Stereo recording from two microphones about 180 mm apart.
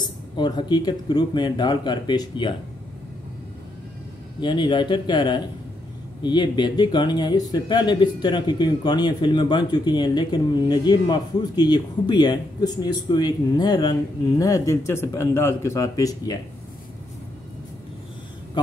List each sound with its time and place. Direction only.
0.0 s speech: 25° left (ahead or behind)
4.4 s speech: 25° left (ahead or behind)